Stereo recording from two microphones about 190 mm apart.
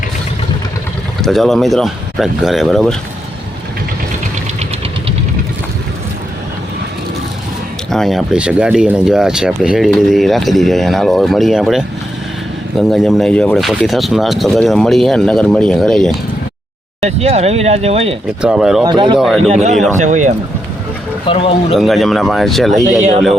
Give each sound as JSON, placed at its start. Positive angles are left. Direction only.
{"t": 1.2, "sound": "speech", "side_deg": 0}
{"t": 7.9, "sound": "speech", "side_deg": 0}
{"t": 12.9, "sound": "speech", "side_deg": 0}
{"t": 17.0, "sound": "speech", "side_deg": -35}
{"t": 18.4, "sound": "speech", "side_deg": -5}
{"t": 18.8, "sound": "speech", "side_deg": -25}
{"t": 19.4, "sound": "speech", "side_deg": -35}
{"t": 21.2, "sound": "speech", "side_deg": 30}
{"t": 21.8, "sound": "speech", "side_deg": 0}
{"t": 22.8, "sound": "speech", "side_deg": -40}